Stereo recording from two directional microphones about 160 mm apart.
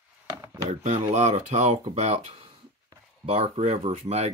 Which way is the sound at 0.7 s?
45° right (ahead or behind).